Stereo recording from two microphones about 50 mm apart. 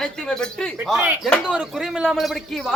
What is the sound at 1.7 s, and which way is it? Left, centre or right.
Speech, centre.